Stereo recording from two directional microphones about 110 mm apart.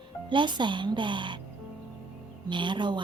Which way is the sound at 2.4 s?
45° right (ahead or behind).